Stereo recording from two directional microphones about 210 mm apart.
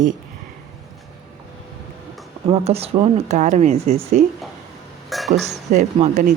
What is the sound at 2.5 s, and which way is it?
Speech, 25° right (ahead or behind).